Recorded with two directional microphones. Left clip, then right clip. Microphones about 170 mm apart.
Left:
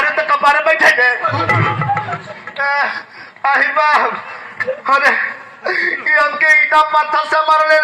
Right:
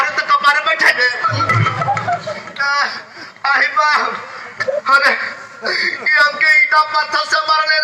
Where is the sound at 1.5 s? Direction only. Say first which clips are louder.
Left 1 dB; 30° left (ahead or behind).